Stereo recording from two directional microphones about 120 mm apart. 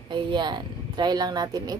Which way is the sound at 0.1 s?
40° right (ahead or behind).